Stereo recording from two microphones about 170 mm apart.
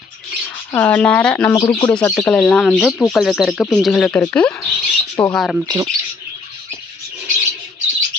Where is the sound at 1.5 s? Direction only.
30° left (ahead or behind).